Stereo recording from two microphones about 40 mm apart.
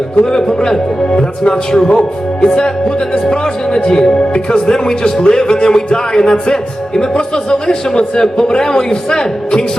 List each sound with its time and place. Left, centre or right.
0.3 s speech: centre